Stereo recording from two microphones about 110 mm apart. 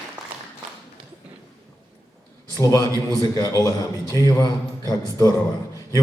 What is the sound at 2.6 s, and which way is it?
A man's voice, 30° left (ahead or behind).